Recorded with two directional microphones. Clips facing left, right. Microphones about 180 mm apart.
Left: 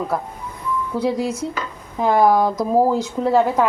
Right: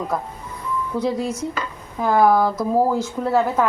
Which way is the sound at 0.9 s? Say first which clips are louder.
Left 1 dB; 5° left (ahead or behind).